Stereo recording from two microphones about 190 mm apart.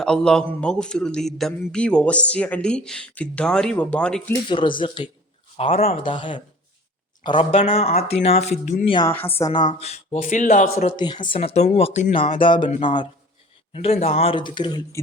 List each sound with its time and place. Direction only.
0.0 s a man's voice: 5° left (ahead or behind)
4.4 s speech: 25° left (ahead or behind)
8.9 s speech: 20° left (ahead or behind)
9.1 s a woman's voice: 10° left (ahead or behind)
9.6 s speech: 35° left (ahead or behind); by 10.8 s 50° left (ahead or behind)
10.8 s speech: 25° left (ahead or behind)